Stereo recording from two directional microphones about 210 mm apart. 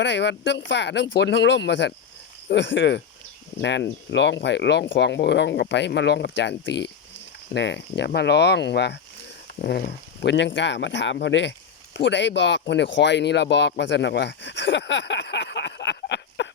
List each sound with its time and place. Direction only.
0.0 s speech: 55° left (ahead or behind)